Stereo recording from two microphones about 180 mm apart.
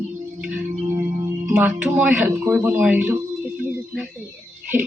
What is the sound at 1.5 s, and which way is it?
A man's voice, 10° right (ahead or behind).